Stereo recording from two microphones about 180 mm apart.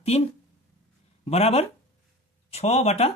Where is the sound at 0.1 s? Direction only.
35° left (ahead or behind).